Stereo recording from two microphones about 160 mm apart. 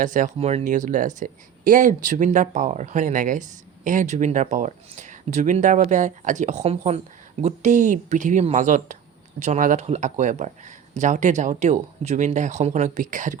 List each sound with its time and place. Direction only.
0.0 s speech: 55° right (ahead or behind)
0.3 s speech: 40° right (ahead or behind)